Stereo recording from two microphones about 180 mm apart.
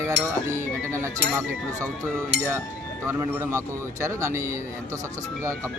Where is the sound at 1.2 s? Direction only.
70° right (ahead or behind).